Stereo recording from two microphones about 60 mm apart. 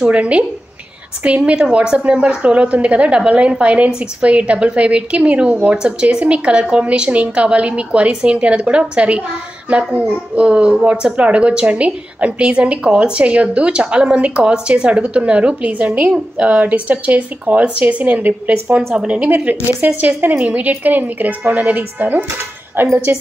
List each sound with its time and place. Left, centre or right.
0.0 s speech: right
19.3 s speech: right